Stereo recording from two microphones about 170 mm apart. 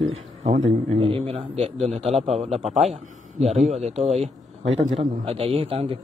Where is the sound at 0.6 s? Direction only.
30° right (ahead or behind).